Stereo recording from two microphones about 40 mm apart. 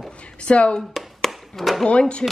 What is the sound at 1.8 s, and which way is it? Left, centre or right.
Speech, left.